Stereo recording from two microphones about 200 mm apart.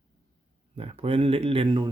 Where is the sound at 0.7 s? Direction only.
30° right (ahead or behind).